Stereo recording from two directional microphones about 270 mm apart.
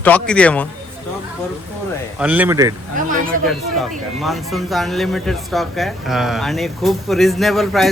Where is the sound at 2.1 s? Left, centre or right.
Centre.